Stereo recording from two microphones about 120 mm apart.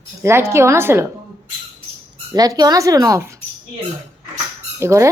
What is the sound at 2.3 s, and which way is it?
Speech, 35° right (ahead or behind).